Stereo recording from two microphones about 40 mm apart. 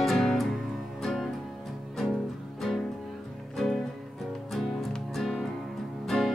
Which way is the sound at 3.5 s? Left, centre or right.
Centre.